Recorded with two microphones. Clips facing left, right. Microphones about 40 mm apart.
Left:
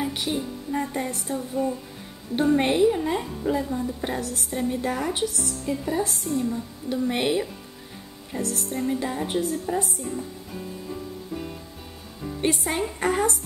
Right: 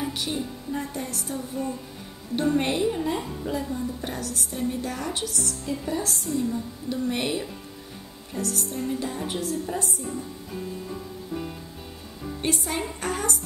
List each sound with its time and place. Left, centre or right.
0.0 s music: centre
0.9 s a woman's voice: left
1.3 s music: centre
2.3 s speech: centre
4.1 s a woman's voice: left
5.9 s speech: centre
6.9 s a woman's voice: centre
8.7 s speech: centre
12.4 s a woman's voice: centre